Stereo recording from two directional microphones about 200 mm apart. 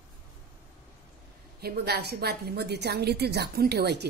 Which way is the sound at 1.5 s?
55° right (ahead or behind).